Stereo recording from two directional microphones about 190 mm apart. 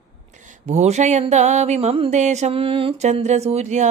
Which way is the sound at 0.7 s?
35° right (ahead or behind).